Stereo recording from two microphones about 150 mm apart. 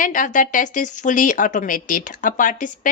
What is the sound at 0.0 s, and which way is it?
Speech, 60° left (ahead or behind).